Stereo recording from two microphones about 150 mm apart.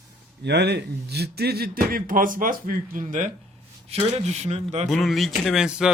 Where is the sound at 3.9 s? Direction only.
40° right (ahead or behind).